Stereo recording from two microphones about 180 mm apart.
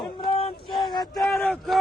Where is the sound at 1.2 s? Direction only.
5° left (ahead or behind).